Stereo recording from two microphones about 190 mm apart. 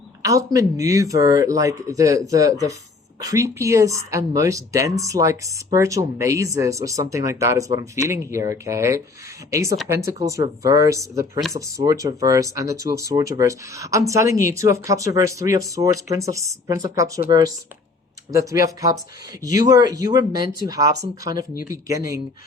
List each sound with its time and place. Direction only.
0.2 s speech: 15° right (ahead or behind)